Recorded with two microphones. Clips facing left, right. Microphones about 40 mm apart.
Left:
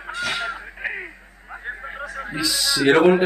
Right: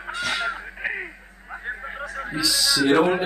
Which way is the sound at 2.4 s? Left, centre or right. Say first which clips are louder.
Even; left.